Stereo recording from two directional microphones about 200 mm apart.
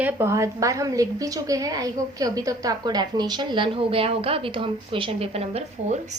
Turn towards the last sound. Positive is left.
turn(degrees=-35)  # may be behind; listen again after turning